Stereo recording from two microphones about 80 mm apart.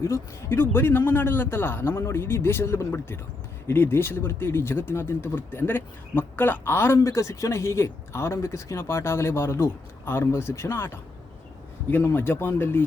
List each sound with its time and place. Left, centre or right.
0.0 s a man's voice: left